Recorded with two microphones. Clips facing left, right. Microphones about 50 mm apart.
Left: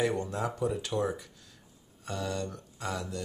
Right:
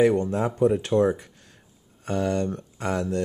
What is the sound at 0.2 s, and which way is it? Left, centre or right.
Speech, right.